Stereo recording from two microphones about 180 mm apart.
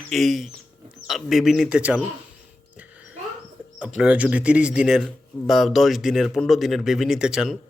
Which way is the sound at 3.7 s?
5° right (ahead or behind).